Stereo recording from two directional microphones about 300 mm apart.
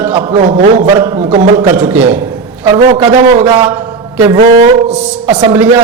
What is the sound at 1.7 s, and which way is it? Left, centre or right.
Speech, centre.